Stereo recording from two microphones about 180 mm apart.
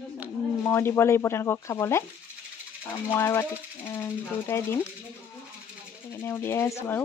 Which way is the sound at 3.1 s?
15° left (ahead or behind).